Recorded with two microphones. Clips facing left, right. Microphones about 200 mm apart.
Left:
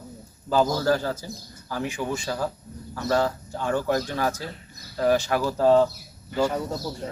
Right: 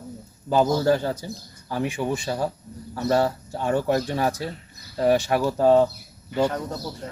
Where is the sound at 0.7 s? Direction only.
25° right (ahead or behind).